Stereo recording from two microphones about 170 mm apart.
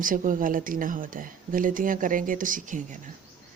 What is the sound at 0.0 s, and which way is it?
Speech, 50° right (ahead or behind).